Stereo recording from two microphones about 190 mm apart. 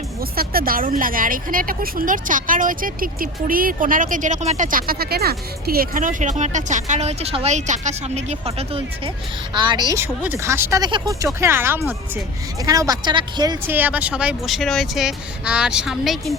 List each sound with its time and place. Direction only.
0.2 s speech: 50° right (ahead or behind); by 13.6 s 20° right (ahead or behind)
13.7 s speech: 10° right (ahead or behind)